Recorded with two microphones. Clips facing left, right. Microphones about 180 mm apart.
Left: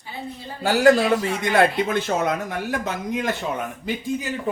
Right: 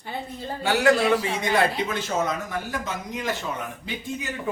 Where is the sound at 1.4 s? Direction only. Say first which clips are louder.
Left 4 dB; 55° left (ahead or behind).